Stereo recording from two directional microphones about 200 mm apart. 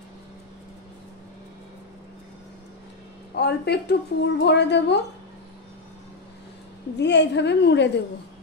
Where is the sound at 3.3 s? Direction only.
55° left (ahead or behind).